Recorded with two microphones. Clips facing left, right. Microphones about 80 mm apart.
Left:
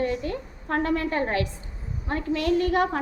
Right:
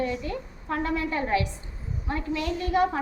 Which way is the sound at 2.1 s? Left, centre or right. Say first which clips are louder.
Left 5 dB; left.